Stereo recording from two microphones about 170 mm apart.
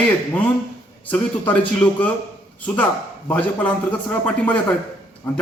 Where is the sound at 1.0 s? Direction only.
10° left (ahead or behind).